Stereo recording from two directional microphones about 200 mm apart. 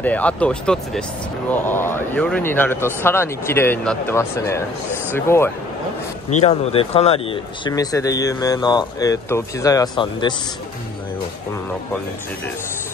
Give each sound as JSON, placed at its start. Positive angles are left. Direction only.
{"t": 0.0, "sound": "speech", "side_deg": 5}
{"t": 6.4, "sound": "a man's voice", "side_deg": 30}